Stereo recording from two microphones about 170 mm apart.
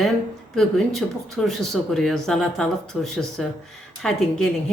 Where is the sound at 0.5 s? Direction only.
Centre (ahead or behind).